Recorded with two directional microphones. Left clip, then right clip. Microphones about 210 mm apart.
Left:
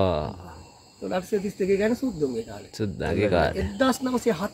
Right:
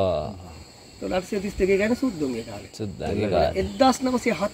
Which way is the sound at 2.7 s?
40° left (ahead or behind).